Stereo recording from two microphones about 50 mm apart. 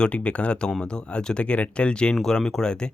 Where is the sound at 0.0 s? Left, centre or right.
Left.